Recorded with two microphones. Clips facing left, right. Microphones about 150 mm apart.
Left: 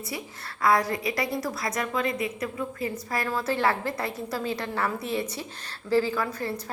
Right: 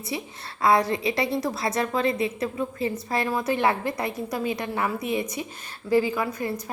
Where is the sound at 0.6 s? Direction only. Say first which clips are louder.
Right 2 dB; 25° right (ahead or behind).